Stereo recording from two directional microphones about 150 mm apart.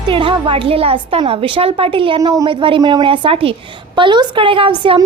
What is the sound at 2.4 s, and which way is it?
A woman's voice, 35° right (ahead or behind).